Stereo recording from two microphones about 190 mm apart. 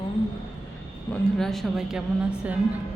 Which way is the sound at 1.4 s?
Centre (ahead or behind).